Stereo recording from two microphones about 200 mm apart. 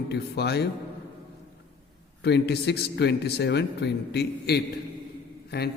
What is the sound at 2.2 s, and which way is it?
A man's voice, 55° left (ahead or behind).